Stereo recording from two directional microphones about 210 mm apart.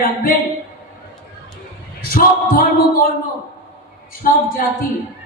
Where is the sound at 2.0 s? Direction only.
45° left (ahead or behind).